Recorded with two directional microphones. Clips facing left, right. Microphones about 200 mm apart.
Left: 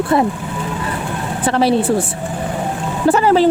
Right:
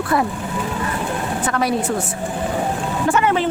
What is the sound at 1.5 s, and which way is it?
Speech, 30° left (ahead or behind).